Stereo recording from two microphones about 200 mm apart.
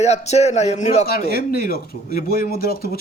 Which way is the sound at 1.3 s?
50° left (ahead or behind).